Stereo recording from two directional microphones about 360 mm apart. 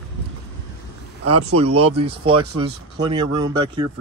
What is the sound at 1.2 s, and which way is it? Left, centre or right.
Speech, right.